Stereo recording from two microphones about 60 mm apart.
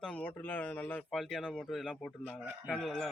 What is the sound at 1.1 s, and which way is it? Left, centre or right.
Speech, centre.